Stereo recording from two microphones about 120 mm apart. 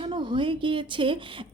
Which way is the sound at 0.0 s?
40° right (ahead or behind).